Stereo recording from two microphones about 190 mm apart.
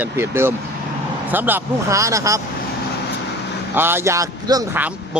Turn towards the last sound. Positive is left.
turn(degrees=-20)  # may be behind; listen again after turning